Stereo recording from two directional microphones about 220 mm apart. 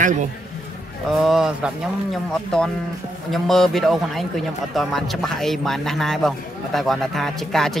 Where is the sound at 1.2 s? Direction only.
Centre (ahead or behind).